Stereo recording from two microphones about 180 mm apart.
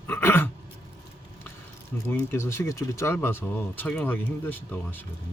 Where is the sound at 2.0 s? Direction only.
15° left (ahead or behind).